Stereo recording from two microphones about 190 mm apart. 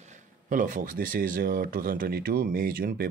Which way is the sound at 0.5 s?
45° right (ahead or behind).